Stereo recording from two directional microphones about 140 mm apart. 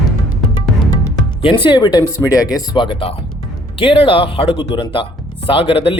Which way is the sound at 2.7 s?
35° left (ahead or behind).